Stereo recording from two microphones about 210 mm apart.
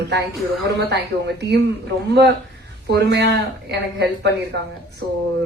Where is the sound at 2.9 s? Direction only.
55° right (ahead or behind).